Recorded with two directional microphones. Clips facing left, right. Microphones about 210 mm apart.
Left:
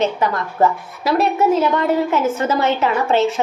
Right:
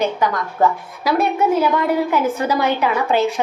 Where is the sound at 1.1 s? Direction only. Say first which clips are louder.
Left 1 dB; centre (ahead or behind).